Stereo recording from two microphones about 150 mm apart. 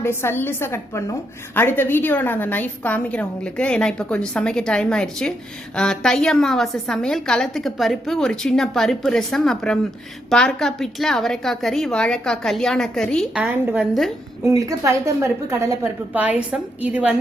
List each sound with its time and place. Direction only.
0.0 s a woman's voice: 15° left (ahead or behind)
13.3 s a woman's voice: 10° right (ahead or behind)
14.4 s a woman's voice: 20° right (ahead or behind)